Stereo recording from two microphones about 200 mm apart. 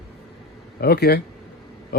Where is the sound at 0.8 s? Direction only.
55° left (ahead or behind).